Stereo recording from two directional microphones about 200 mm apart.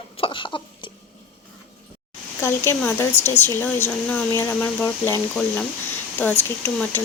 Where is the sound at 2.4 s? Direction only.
15° left (ahead or behind).